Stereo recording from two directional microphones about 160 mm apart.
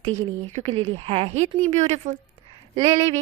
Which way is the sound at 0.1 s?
50° right (ahead or behind).